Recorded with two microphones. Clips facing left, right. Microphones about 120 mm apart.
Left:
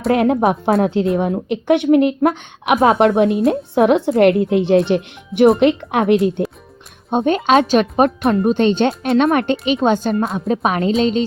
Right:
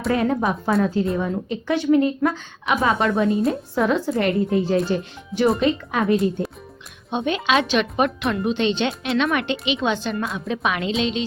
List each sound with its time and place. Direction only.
0.1 s a woman's voice: 70° left (ahead or behind)
7.1 s speech: 45° left (ahead or behind)